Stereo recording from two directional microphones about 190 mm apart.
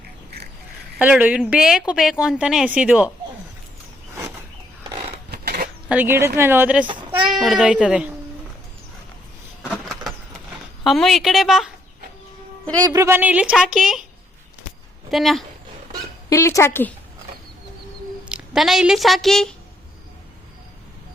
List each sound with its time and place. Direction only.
0.9 s a woman's voice: 10° right (ahead or behind)
4.9 s a sound: 25° right (ahead or behind)
5.1 s a sound: 55° right (ahead or behind)
5.9 s a woman's voice: 10° right (ahead or behind)
10.8 s a woman's voice: centre (ahead or behind)
12.8 s a woman's voice: 15° right (ahead or behind)
15.1 s a woman's voice: centre (ahead or behind)
16.3 s speech: 15° left (ahead or behind)
18.3 s speech: 5° right (ahead or behind)